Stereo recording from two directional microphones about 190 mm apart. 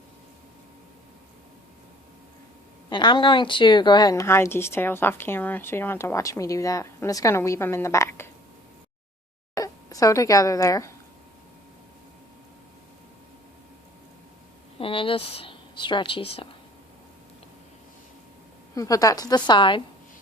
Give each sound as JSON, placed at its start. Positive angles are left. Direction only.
{"t": 2.9, "sound": "speech", "side_deg": 25}
{"t": 9.6, "sound": "speech", "side_deg": 20}
{"t": 14.8, "sound": "a woman's voice", "side_deg": 30}
{"t": 18.7, "sound": "a woman's voice", "side_deg": 20}